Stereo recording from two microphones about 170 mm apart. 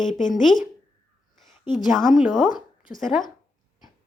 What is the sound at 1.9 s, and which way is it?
A woman's voice, centre (ahead or behind).